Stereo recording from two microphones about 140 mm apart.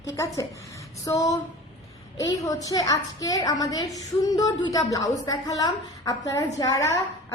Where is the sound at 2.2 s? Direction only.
25° left (ahead or behind).